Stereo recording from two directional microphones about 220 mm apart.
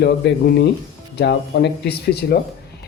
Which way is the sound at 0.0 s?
45° left (ahead or behind).